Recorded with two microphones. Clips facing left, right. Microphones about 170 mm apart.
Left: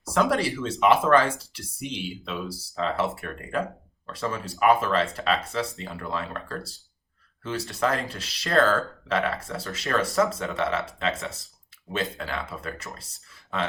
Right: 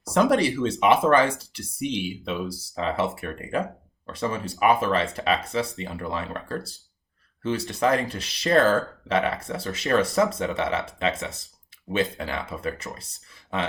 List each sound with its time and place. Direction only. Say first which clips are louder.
0.2 s speech: right 4 dB; 20° right (ahead or behind)